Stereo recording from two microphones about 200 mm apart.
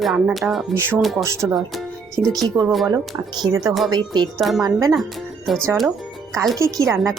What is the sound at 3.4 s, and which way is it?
Speech, 15° right (ahead or behind).